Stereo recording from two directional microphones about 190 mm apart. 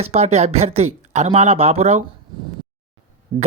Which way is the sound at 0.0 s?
35° right (ahead or behind).